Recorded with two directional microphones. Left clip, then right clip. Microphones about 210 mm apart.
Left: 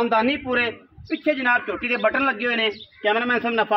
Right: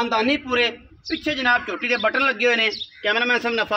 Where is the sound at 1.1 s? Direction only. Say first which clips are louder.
Even; 5° right (ahead or behind).